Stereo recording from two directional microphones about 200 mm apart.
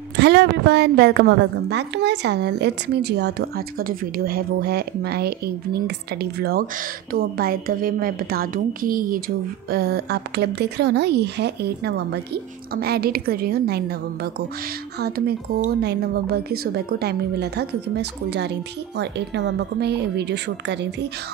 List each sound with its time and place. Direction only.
0.2 s a woman's voice: 55° right (ahead or behind)
7.1 s a woman's voice: 50° right (ahead or behind)